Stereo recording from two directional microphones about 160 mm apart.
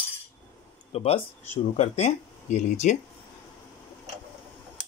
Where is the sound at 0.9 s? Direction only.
40° left (ahead or behind).